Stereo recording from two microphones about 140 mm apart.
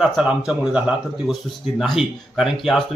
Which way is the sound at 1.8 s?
Centre (ahead or behind).